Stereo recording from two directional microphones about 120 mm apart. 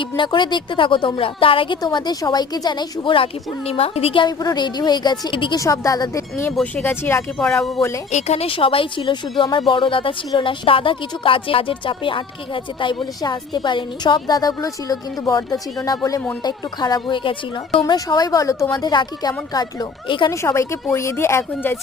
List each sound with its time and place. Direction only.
0.2 s a woman's voice: 40° left (ahead or behind)
3.7 s a woman's voice: 55° left (ahead or behind)
5.5 s a woman's voice: 25° left (ahead or behind)
7.3 s speech: 5° left (ahead or behind)
7.8 s a woman's voice: 25° left (ahead or behind)
8.1 s a woman's voice: 60° left (ahead or behind); by 20.3 s 40° left (ahead or behind)
20.3 s a woman's voice: 25° left (ahead or behind)